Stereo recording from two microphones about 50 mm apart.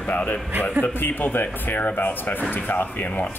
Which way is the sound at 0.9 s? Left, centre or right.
Left.